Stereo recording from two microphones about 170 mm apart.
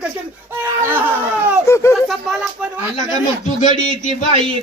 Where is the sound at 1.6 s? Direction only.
15° left (ahead or behind).